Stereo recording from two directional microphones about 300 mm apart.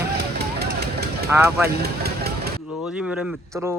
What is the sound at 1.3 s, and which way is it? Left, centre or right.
Speech, centre.